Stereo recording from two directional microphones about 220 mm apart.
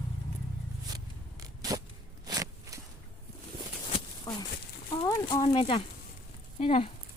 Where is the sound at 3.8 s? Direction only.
20° left (ahead or behind).